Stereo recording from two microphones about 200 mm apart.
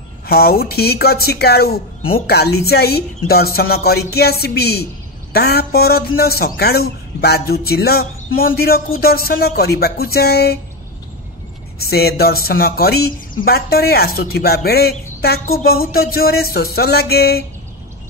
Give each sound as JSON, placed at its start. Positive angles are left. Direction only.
{"t": 0.3, "sound": "a woman's voice", "side_deg": 50}
{"t": 11.8, "sound": "a woman's voice", "side_deg": 50}